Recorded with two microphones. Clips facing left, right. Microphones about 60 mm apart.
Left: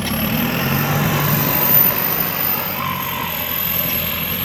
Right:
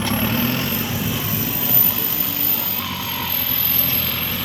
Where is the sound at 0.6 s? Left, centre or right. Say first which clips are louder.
Left 5 dB; left.